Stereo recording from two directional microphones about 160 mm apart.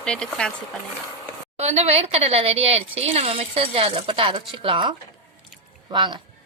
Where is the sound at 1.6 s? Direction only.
40° right (ahead or behind).